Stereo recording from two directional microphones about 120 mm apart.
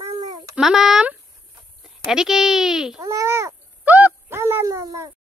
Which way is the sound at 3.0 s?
25° right (ahead or behind).